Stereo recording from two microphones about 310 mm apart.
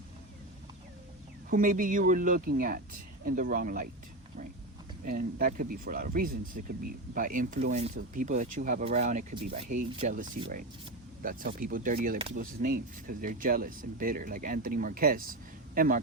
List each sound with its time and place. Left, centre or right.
1.5 s speech: right
5.0 s speech: right